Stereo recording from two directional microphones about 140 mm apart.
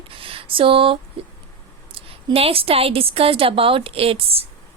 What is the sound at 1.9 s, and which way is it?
A woman's voice, 40° right (ahead or behind).